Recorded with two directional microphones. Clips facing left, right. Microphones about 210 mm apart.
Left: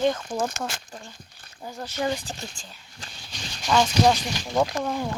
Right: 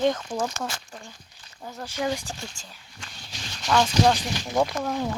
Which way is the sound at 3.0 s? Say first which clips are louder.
Left 1 dB; 35° left (ahead or behind).